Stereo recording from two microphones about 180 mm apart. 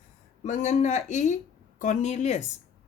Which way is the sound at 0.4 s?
40° left (ahead or behind).